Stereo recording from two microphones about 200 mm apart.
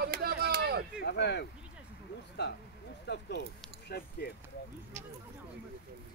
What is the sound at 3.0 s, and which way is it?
Speech, 55° left (ahead or behind).